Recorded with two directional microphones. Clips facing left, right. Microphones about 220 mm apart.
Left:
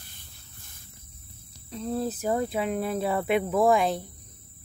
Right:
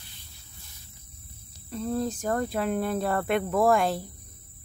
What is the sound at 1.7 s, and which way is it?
Speech, centre (ahead or behind).